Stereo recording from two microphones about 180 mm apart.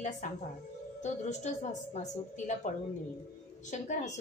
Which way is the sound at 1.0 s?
40° left (ahead or behind).